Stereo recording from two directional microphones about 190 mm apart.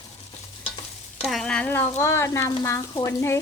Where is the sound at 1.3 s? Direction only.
5° left (ahead or behind).